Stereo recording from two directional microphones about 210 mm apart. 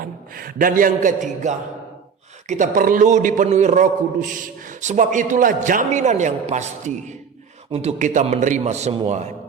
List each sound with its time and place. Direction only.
0.0 s a man's voice: 45° right (ahead or behind)